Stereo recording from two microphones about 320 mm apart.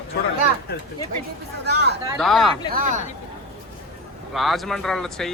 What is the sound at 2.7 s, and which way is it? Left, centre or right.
Speech, right.